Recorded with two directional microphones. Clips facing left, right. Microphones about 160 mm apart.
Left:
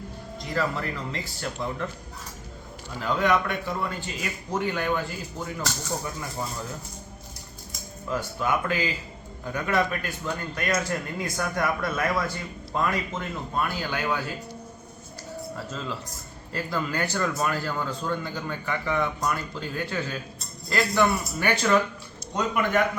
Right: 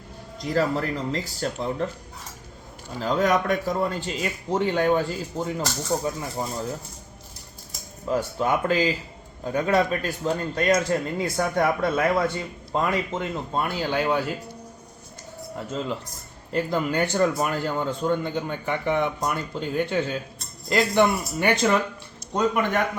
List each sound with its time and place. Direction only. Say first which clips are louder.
0.4 s speech: right 5 dB; 40° right (ahead or behind)
3.0 s speech: right 2 dB; 40° right (ahead or behind)
8.0 s a man's voice: right 4 dB; 30° right (ahead or behind)
15.5 s a man's voice: right 8 dB; 20° right (ahead or behind)